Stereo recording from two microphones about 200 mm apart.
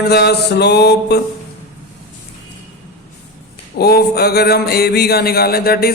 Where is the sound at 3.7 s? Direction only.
50° left (ahead or behind).